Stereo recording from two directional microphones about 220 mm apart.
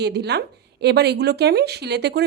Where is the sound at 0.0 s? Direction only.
50° right (ahead or behind).